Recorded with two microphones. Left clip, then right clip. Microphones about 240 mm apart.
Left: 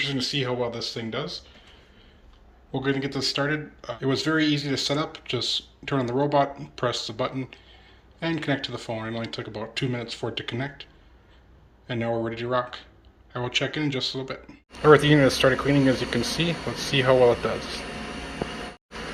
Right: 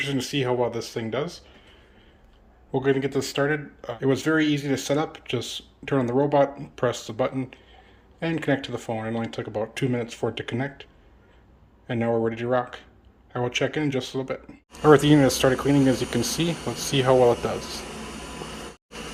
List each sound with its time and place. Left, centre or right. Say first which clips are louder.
0.0 s speech: even; centre
2.7 s speech: right 4 dB; centre
11.9 s speech: right 3 dB; centre